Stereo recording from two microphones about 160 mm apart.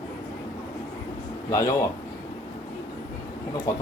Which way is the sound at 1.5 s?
20° left (ahead or behind).